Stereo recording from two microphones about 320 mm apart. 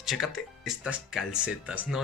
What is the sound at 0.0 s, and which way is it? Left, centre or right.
Speech, centre.